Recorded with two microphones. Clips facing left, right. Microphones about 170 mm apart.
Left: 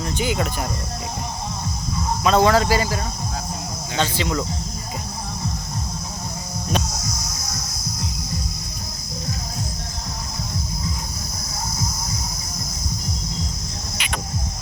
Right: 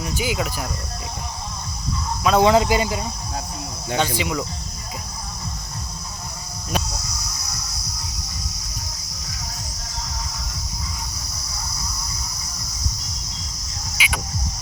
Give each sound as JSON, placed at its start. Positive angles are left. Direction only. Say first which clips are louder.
{"t": 0.0, "sound": "speech", "louder": "left 1 dB", "side_deg": -5}
{"t": 2.4, "sound": "speech", "louder": "right 3 dB", "side_deg": -20}
{"t": 11.7, "sound": "music", "louder": "left 6 dB", "side_deg": -70}
{"t": 14.0, "sound": "cricket", "louder": "right 2 dB", "side_deg": -5}